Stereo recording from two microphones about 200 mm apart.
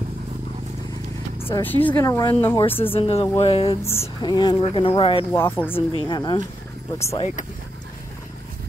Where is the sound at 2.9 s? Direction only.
25° left (ahead or behind).